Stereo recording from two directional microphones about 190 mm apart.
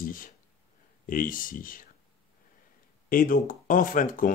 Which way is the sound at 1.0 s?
45° left (ahead or behind).